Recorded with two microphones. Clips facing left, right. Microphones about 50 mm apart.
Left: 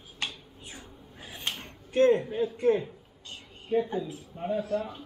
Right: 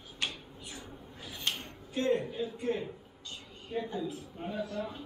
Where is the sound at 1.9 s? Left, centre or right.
Left.